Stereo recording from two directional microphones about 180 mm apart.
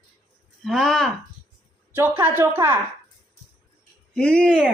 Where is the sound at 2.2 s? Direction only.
10° right (ahead or behind).